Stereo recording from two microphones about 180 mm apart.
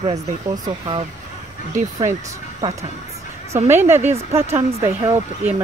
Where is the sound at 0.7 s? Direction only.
25° right (ahead or behind).